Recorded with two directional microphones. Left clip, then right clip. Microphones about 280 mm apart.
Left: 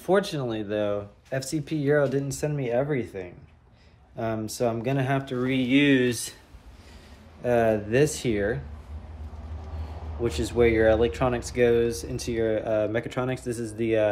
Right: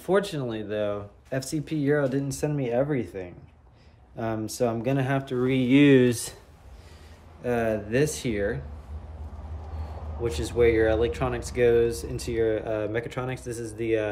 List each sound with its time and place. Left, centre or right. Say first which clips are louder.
0.0 s speech: left 1 dB; centre
5.5 s speech: right 3 dB; right
7.4 s speech: left 4 dB; centre
10.2 s speech: even; centre